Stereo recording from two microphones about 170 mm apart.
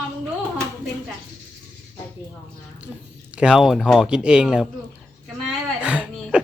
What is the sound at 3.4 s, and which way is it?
Speech, 5° right (ahead or behind).